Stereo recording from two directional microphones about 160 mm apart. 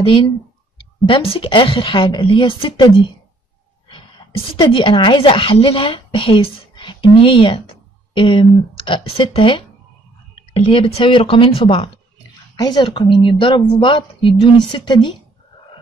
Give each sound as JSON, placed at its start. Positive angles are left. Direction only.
{"t": 0.0, "sound": "a woman's voice", "side_deg": 35}